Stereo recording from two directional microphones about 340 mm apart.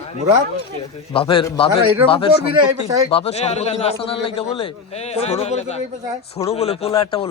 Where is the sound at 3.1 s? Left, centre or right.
Centre.